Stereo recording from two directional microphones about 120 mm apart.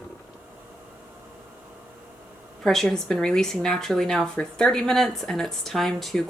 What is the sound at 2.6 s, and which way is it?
Speech, 5° left (ahead or behind).